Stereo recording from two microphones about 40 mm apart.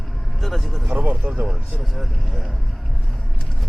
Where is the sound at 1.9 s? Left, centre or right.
Centre.